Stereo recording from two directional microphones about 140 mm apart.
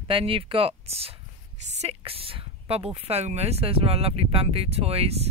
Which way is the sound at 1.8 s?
45° right (ahead or behind).